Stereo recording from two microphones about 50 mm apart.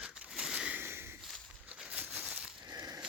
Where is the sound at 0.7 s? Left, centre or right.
Right.